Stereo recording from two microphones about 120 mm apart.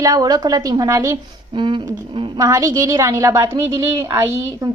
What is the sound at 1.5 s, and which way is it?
Speech, 40° right (ahead or behind).